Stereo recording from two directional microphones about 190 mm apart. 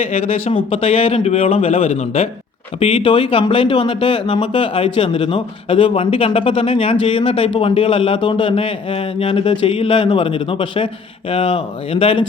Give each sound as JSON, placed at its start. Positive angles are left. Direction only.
{"t": 0.0, "sound": "speech", "side_deg": 30}